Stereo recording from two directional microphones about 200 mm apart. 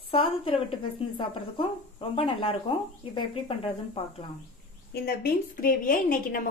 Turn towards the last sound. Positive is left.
turn(degrees=40)  # may be behind; listen again after turning